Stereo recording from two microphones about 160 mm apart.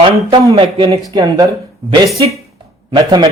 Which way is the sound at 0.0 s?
35° right (ahead or behind).